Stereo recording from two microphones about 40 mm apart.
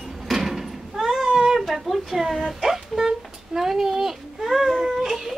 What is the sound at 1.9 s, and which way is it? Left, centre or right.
Speech, centre.